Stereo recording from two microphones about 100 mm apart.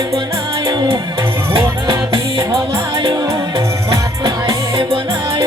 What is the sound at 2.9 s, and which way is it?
Music, 55° right (ahead or behind).